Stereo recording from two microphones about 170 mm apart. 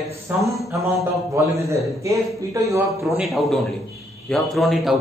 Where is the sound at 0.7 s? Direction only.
15° right (ahead or behind).